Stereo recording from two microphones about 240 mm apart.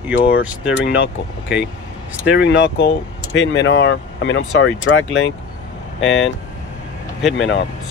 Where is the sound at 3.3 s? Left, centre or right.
Left.